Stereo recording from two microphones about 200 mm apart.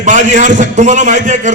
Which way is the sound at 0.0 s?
40° right (ahead or behind).